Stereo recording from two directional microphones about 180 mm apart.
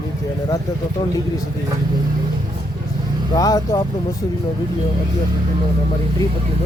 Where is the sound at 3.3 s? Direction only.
20° left (ahead or behind).